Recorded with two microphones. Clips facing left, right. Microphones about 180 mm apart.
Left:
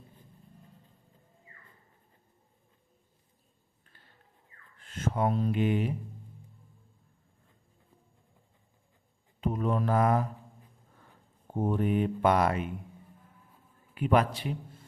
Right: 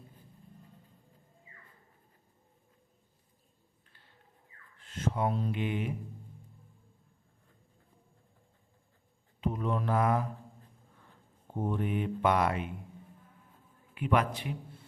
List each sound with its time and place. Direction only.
4.9 s speech: 50° left (ahead or behind)
9.4 s speech: 45° left (ahead or behind)
11.5 s speech: 45° left (ahead or behind)
13.9 s a man's voice: 35° left (ahead or behind)